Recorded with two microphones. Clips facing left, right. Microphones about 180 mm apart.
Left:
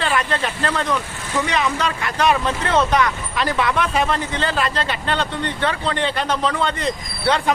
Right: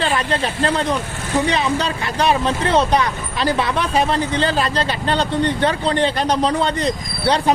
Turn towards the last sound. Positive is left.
turn(degrees=-35)  # may be behind; listen again after turning